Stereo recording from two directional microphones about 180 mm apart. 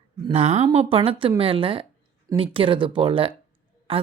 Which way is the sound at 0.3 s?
35° right (ahead or behind).